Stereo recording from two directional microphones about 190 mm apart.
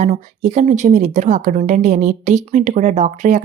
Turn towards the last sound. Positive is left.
turn(degrees=-40)  # may be behind; listen again after turning